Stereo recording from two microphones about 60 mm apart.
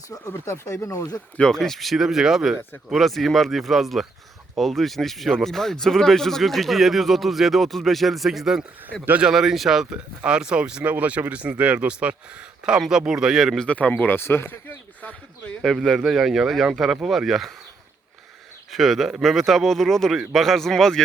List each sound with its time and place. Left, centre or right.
0.4 s speech: left
1.4 s speech: centre
13.6 s speech: left
14.0 s speech: left
15.6 s speech: centre
16.0 s speech: centre
18.7 s speech: centre